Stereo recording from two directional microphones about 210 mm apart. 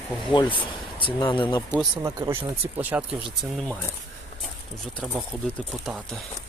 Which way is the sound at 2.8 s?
5° right (ahead or behind).